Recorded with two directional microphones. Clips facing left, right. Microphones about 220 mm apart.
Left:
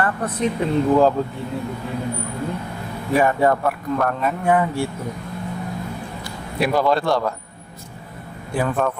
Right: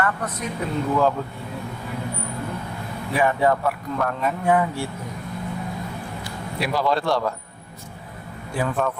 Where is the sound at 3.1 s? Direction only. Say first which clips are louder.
Left 3 dB; 45° left (ahead or behind).